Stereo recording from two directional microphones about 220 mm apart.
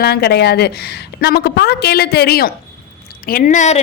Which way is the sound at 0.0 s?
45° left (ahead or behind).